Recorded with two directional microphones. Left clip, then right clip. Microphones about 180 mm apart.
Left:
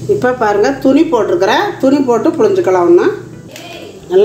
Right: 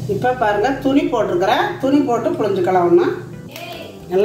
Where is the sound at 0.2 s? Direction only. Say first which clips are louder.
Left 2 dB; 40° left (ahead or behind).